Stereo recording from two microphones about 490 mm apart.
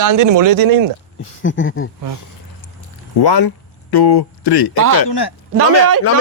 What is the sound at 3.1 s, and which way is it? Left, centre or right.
Speech, left.